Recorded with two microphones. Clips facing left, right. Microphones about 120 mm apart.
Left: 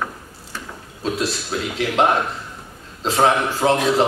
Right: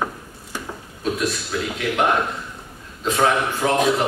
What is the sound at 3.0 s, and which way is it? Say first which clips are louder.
A man's voice: left 2 dB; 30° left (ahead or behind).